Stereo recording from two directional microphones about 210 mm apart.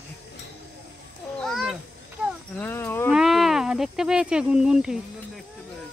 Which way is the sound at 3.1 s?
Centre (ahead or behind).